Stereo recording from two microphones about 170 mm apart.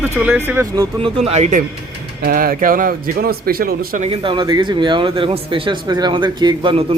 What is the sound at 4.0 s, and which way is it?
Speech, 30° right (ahead or behind).